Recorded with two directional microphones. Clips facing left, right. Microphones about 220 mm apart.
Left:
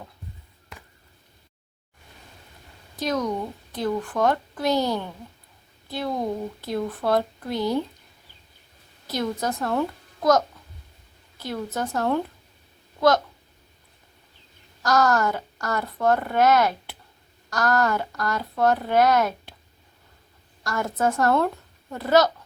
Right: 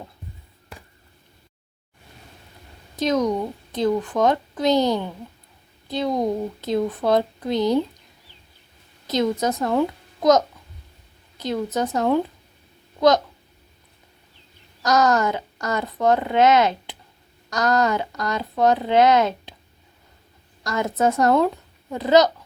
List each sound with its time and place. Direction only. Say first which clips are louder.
2.9 s a woman's voice: right 5 dB; 20° right (ahead or behind)
9.4 s speech: right 4 dB; 20° right (ahead or behind)
14.8 s a woman's voice: right 2 dB; 20° right (ahead or behind)
20.7 s a woman's voice: right 3 dB; 20° right (ahead or behind)